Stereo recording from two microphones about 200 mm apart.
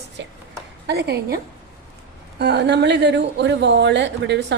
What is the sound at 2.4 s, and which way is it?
A woman's voice, 55° right (ahead or behind).